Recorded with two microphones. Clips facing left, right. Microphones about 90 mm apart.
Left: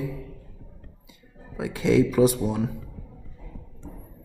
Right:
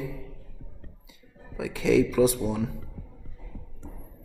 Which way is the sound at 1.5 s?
45° left (ahead or behind).